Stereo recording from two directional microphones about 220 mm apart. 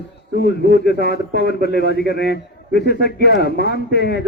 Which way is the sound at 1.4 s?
45° left (ahead or behind).